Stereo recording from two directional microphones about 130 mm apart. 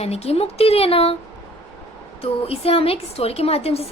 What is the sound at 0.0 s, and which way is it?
A woman's voice, 55° left (ahead or behind).